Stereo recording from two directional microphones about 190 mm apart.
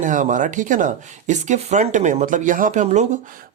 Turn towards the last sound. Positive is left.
turn(degrees=-45)  # may be behind; listen again after turning